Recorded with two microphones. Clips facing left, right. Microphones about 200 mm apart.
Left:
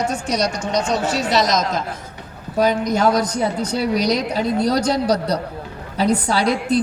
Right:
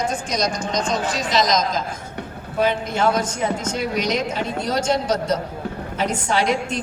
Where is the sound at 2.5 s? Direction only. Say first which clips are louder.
Left 3 dB; 40° left (ahead or behind).